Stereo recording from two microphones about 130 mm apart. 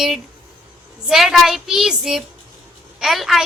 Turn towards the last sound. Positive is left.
turn(degrees=0)  # may be behind; listen again after turning